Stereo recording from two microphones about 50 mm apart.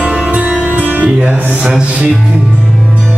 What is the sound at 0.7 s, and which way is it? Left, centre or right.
Music, right.